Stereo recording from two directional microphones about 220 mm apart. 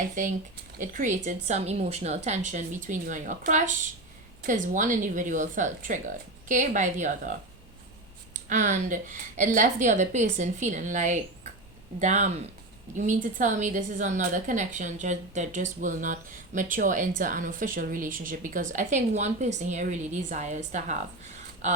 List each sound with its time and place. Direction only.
0.2 s a woman's voice: 35° right (ahead or behind)